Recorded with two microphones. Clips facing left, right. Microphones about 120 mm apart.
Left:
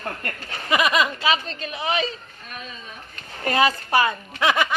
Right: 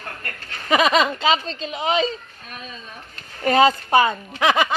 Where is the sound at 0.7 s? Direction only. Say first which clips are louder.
Right 3 dB; 25° right (ahead or behind).